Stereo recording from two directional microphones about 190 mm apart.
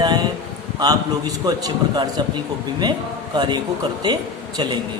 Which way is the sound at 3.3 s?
25° right (ahead or behind).